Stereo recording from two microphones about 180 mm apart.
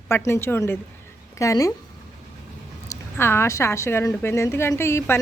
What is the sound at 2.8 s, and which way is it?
Speech, 15° left (ahead or behind).